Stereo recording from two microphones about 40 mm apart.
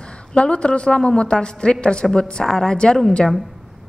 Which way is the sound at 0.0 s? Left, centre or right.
Left.